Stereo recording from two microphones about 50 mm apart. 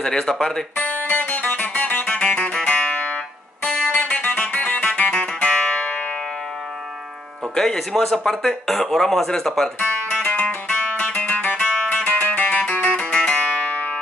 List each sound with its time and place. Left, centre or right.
0.0 s speech: centre
1.0 s music: left
2.0 s music: centre
5.1 s music: centre
7.5 s speech: centre
9.8 s music: left
13.7 s music: left